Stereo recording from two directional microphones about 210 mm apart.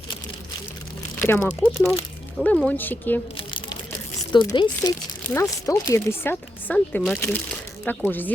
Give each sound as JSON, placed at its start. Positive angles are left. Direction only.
{"t": 1.2, "sound": "speech", "side_deg": 10}
{"t": 3.3, "sound": "a sound", "side_deg": 25}
{"t": 4.3, "sound": "speech", "side_deg": 20}